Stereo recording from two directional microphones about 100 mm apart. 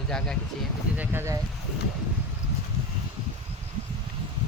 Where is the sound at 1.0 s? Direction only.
20° right (ahead or behind).